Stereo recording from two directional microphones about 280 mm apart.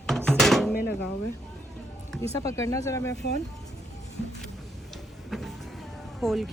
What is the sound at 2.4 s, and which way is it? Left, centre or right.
Speech, centre.